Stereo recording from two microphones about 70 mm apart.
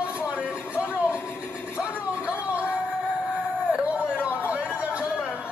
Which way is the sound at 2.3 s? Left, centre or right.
Centre.